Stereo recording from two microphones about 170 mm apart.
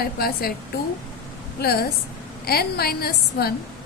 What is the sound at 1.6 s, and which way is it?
A woman's voice, 65° left (ahead or behind).